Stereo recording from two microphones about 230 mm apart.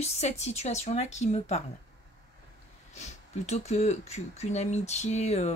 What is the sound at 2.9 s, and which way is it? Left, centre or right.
Speech, left.